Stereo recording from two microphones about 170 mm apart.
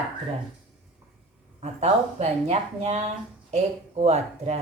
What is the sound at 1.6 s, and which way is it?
Speech, 40° right (ahead or behind).